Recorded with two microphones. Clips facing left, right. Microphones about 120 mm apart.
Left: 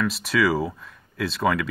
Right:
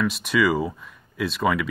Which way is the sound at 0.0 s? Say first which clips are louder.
Right 1 dB; centre (ahead or behind).